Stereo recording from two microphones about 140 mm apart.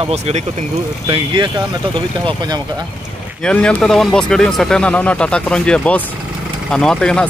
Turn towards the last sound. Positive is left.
turn(degrees=5)  # may be behind; listen again after turning